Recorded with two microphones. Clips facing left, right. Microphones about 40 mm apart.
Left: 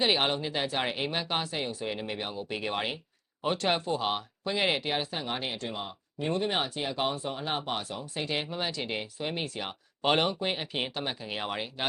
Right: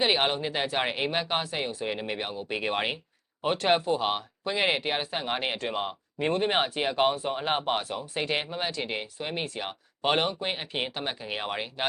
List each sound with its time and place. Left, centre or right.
0.0 s speech: centre
5.1 s speech: right
5.7 s speech: right
6.2 s speech: right; by 11.9 s centre